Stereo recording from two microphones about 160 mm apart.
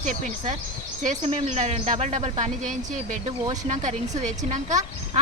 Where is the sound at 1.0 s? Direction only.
45° right (ahead or behind).